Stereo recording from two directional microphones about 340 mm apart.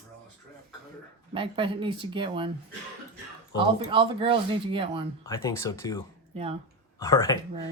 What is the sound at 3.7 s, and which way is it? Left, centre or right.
Speech, centre.